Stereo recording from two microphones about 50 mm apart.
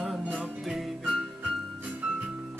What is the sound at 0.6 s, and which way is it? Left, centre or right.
Music, centre.